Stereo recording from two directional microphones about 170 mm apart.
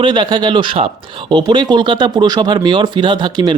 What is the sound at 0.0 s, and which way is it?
Speech, 25° right (ahead or behind).